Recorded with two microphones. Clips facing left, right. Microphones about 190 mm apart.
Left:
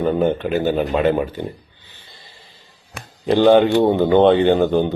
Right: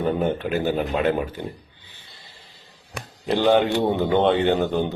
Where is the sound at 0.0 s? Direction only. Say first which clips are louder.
Left 5 dB; 5° right (ahead or behind).